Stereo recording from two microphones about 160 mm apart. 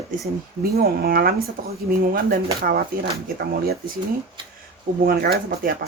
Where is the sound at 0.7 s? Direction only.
70° right (ahead or behind).